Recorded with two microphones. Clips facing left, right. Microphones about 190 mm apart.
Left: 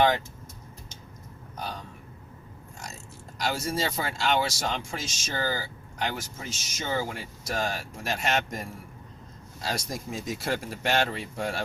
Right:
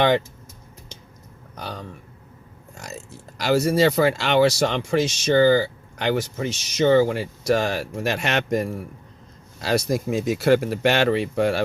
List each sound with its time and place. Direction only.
1.5 s speech: 70° right (ahead or behind)
3.4 s speech: 65° right (ahead or behind)